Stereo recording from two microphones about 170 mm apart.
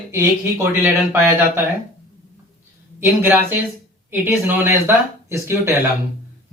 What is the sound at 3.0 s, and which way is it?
Speech, 10° right (ahead or behind).